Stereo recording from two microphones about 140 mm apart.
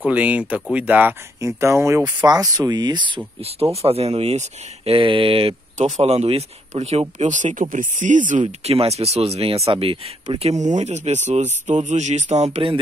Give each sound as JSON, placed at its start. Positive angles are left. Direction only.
{"t": 0.0, "sound": "speech", "side_deg": -10}
{"t": 3.3, "sound": "speech", "side_deg": -45}